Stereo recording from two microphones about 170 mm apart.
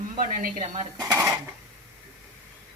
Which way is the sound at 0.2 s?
50° right (ahead or behind).